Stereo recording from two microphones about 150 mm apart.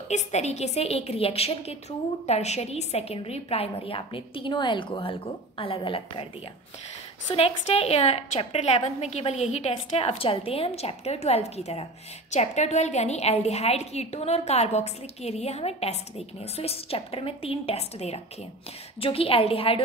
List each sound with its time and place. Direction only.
0.1 s a woman's voice: 50° left (ahead or behind)
7.3 s a woman's voice: 45° left (ahead or behind)